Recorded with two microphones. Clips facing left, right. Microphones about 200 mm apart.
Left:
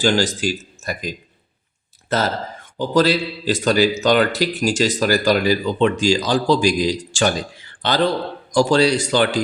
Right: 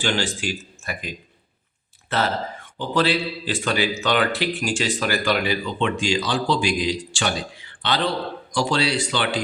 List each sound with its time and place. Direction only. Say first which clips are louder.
0.0 s speech: left 6 dB; 40° left (ahead or behind)